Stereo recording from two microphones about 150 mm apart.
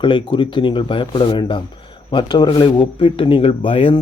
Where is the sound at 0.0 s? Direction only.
30° left (ahead or behind).